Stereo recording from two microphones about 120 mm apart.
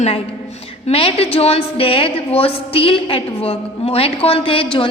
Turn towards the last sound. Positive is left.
turn(degrees=50)  # may be behind; listen again after turning